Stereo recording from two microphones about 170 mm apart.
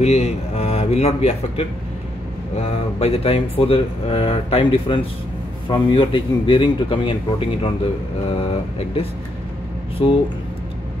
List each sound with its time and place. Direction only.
0.0 s speech: 40° left (ahead or behind)